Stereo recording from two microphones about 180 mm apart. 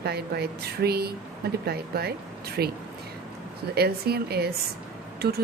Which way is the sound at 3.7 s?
60° right (ahead or behind).